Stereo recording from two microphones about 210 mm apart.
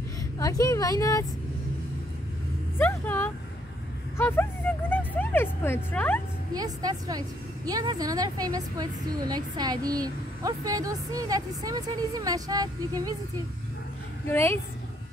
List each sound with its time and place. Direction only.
0.4 s a woman's voice: 15° left (ahead or behind)
2.8 s speech: 10° left (ahead or behind)
6.5 s a woman's voice: 20° right (ahead or behind)
14.3 s a woman's voice: 10° left (ahead or behind)